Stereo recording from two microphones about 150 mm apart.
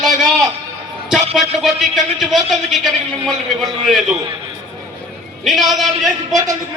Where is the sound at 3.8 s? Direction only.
Centre (ahead or behind).